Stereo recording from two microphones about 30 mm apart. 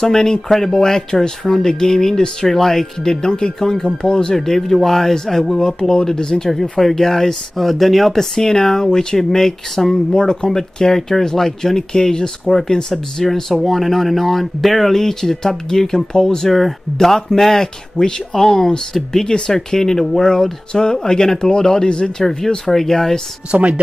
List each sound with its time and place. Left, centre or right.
0.0 s speech: centre
3.0 s speech: left
4.4 s speech: centre
6.5 s speech: centre
8.4 s speech: centre
10.1 s speech: left
10.5 s speech: centre
17.9 s speech: left
18.3 s speech: centre
22.2 s speech: centre
23.5 s a woman's voice: right